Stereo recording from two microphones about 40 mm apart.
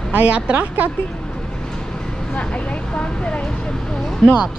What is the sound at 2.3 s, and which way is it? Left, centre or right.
Speech, left.